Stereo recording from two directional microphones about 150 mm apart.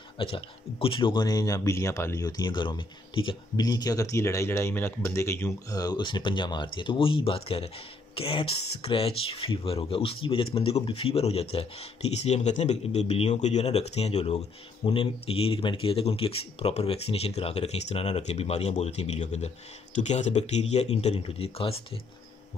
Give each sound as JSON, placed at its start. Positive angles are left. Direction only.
{"t": 0.2, "sound": "speech", "side_deg": 35}